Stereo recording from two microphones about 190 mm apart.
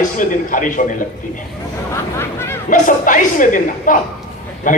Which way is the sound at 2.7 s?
45° left (ahead or behind).